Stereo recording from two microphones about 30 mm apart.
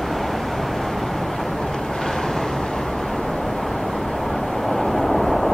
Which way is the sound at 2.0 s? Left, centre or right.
Centre.